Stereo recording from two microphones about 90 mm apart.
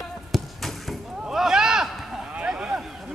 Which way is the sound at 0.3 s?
Centre (ahead or behind).